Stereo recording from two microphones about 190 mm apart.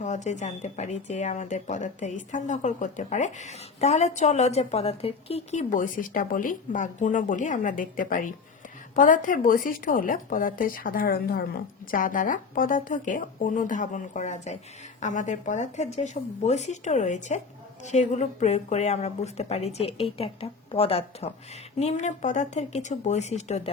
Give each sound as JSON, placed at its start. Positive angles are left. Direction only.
{"t": 0.0, "sound": "speech", "side_deg": 40}